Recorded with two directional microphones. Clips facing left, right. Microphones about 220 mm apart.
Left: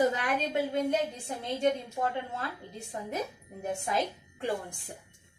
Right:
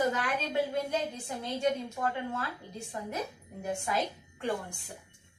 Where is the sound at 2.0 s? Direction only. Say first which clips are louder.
Left 1 dB; 30° left (ahead or behind).